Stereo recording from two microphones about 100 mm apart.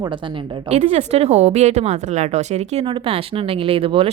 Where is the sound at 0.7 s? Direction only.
90° right.